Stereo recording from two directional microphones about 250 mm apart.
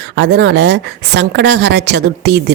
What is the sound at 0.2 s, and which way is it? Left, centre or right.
A woman's voice, right.